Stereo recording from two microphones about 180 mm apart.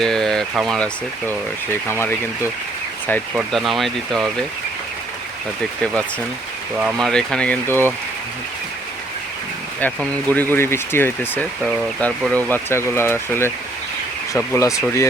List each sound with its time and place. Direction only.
0.0 s speech: centre (ahead or behind)
1.3 s speech: 15° left (ahead or behind)
3.3 s speech: centre (ahead or behind)
5.8 s speech: 5° left (ahead or behind)
6.7 s speech: 5° right (ahead or behind)
7.1 s speech: 5° left (ahead or behind)
9.8 s speech: 10° left (ahead or behind)